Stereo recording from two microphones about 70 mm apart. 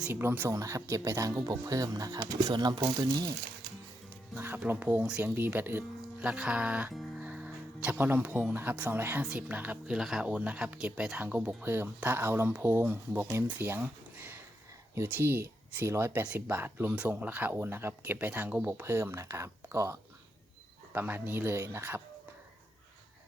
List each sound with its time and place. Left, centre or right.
0.1 s speech: right
0.5 s speech: right
4.4 s speech: right
6.2 s speech: centre
7.2 s music: centre
8.9 s speech: right
9.9 s speech: centre
11.6 s speech: right
13.6 s a sound: right
14.9 s speech: right
18.7 s speech: right
20.9 s speech: right